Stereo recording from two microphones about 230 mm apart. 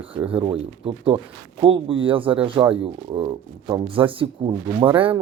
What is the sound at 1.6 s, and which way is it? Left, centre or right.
Speech, right.